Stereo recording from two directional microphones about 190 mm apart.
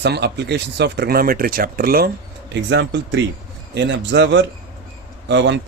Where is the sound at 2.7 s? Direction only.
65° right (ahead or behind).